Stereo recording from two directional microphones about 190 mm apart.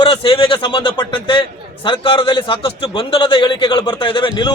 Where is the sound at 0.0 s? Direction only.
25° left (ahead or behind).